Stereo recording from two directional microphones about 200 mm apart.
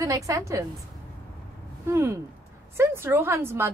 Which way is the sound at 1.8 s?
15° right (ahead or behind).